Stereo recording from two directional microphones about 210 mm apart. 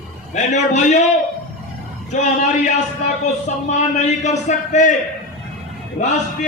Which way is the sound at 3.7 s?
35° left (ahead or behind).